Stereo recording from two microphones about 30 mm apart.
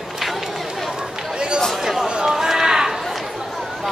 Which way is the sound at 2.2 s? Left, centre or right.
Centre.